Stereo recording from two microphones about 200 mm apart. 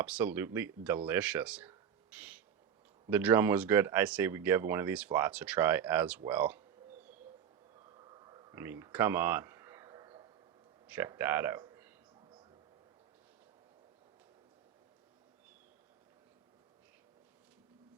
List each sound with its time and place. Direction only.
0.0 s speech: 10° right (ahead or behind)
7.9 s a sound: 20° right (ahead or behind)
10.8 s speech: 5° right (ahead or behind)